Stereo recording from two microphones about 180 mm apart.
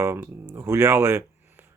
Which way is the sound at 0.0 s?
15° right (ahead or behind).